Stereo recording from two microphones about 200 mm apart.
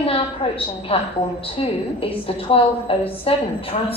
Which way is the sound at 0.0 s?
30° left (ahead or behind).